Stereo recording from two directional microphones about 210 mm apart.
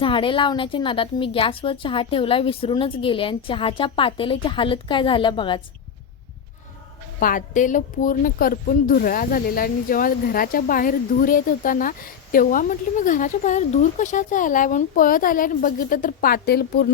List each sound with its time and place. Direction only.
0.0 s a woman's voice: 25° left (ahead or behind)
7.2 s speech: 40° left (ahead or behind)